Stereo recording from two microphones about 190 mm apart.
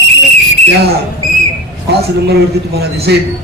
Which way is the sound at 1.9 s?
60° right (ahead or behind).